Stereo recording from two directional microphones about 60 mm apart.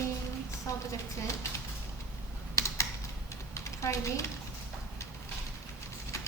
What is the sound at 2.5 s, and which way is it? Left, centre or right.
Typing, left.